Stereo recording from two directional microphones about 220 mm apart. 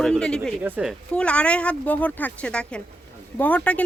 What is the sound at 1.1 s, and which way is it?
Speech, 5° left (ahead or behind).